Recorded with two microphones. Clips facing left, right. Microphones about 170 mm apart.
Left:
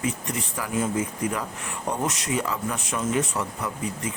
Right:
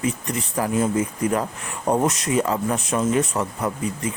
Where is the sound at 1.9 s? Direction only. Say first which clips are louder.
Right 7 dB; 45° right (ahead or behind).